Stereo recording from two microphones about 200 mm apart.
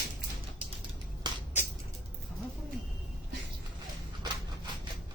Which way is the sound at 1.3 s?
20° right (ahead or behind).